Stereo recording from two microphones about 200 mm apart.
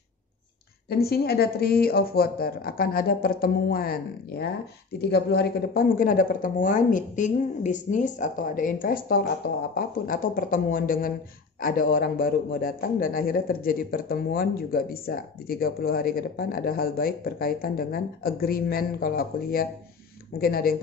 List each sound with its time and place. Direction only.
0.8 s a man's voice: 50° left (ahead or behind)